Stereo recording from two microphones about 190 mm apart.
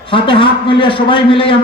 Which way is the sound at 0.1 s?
25° left (ahead or behind).